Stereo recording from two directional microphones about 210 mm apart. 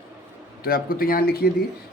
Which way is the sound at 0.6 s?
45° left (ahead or behind).